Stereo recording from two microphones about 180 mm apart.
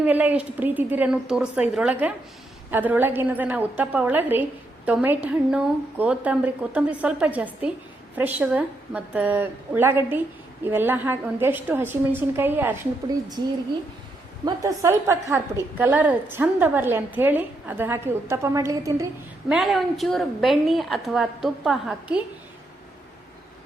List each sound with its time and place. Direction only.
0.0 s a woman's voice: 10° right (ahead or behind)
14.4 s a woman's voice: 15° right (ahead or behind)
19.5 s a woman's voice: centre (ahead or behind)